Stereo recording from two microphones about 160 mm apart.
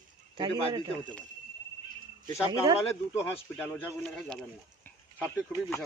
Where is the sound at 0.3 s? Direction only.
30° right (ahead or behind).